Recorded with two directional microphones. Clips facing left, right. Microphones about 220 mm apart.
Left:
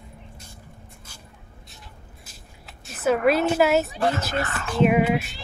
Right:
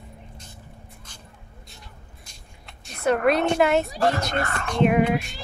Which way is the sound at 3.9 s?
40° right (ahead or behind).